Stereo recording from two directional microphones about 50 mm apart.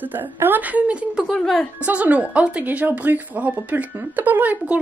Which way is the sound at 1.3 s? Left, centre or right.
Centre.